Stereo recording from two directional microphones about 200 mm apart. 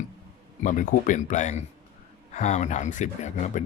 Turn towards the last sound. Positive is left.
turn(degrees=35)  # may be behind; listen again after turning